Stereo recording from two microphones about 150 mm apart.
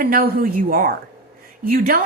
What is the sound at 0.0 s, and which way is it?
A woman's voice, 75° right (ahead or behind).